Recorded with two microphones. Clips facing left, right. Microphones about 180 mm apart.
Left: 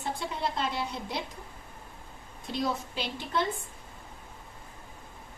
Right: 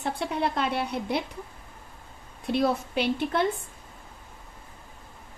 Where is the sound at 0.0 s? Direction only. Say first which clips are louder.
Right 5 dB; 65° right (ahead or behind).